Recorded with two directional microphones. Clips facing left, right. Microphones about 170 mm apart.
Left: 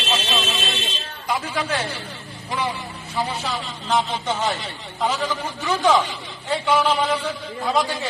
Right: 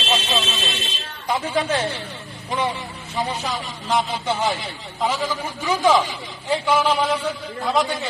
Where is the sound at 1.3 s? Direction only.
25° right (ahead or behind).